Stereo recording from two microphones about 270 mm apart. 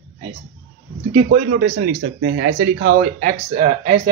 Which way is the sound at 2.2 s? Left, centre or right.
Right.